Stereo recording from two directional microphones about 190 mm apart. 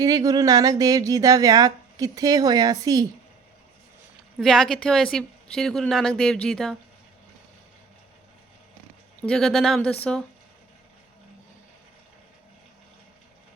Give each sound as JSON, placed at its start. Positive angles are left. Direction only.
{"t": 0.0, "sound": "speech", "side_deg": -20}
{"t": 4.4, "sound": "a woman's voice", "side_deg": 0}
{"t": 9.2, "sound": "a woman's voice", "side_deg": 5}